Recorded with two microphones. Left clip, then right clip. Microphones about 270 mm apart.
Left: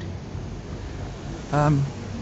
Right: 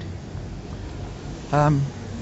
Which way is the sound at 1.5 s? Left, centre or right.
Centre.